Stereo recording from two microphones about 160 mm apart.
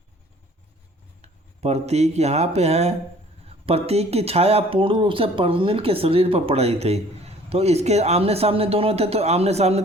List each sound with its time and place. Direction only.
1.2 s speech: 40° right (ahead or behind)